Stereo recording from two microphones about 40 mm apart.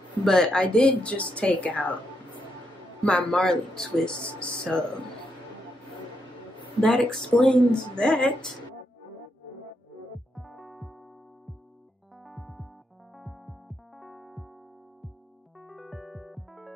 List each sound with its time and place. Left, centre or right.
0.2 s speech: centre
1.0 s a woman's voice: left
3.0 s a man's voice: left
3.3 s a woman's voice: centre
6.8 s a woman's voice: centre
10.3 s music: centre
12.3 s keyboard: centre
15.6 s electric piano: centre